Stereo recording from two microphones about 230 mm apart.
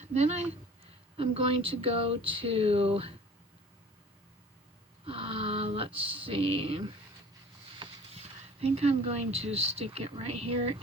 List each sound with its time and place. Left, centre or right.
0.0 s speech: right
5.0 s speech: right
7.8 s a sound: right
9.4 s speech: right